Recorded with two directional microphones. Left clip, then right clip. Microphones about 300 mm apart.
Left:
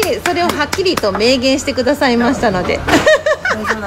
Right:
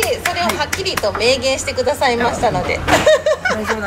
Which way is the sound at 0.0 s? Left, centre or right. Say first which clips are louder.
Left 3 dB; left.